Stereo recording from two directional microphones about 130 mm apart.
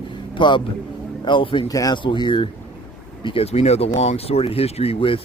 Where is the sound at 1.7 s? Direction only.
30° left (ahead or behind); by 5.2 s 45° left (ahead or behind).